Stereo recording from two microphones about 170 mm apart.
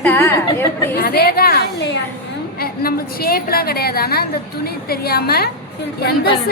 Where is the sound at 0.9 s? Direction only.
65° left (ahead or behind).